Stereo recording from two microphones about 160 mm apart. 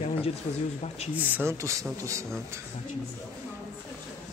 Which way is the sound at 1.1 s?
10° right (ahead or behind).